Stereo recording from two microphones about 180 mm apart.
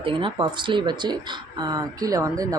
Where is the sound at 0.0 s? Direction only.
30° right (ahead or behind).